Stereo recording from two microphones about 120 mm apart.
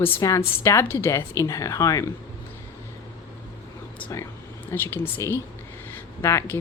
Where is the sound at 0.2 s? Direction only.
25° left (ahead or behind).